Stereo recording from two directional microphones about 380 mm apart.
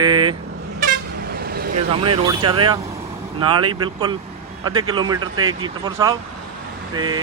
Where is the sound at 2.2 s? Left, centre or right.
Centre.